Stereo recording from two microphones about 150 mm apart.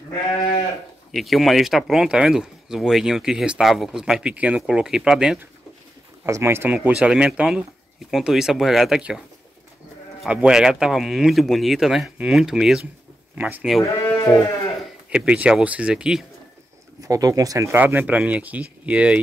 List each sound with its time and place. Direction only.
1.1 s speech: centre (ahead or behind)
6.2 s speech: 20° right (ahead or behind); by 9.2 s 5° right (ahead or behind)
10.2 s speech: 5° right (ahead or behind)
13.8 s sheep: 20° left (ahead or behind)
15.0 s speech: 5° right (ahead or behind)
17.0 s speech: 25° right (ahead or behind); by 19.1 s 10° right (ahead or behind)